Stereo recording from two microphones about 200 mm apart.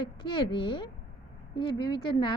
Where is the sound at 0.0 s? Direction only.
25° left (ahead or behind).